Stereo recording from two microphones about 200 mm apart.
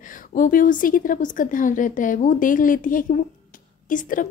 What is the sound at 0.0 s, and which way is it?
A woman's voice, 40° left (ahead or behind).